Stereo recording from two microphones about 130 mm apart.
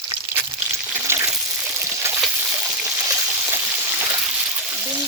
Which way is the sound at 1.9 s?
20° right (ahead or behind).